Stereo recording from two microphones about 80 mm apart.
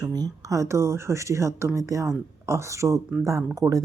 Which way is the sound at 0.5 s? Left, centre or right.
Right.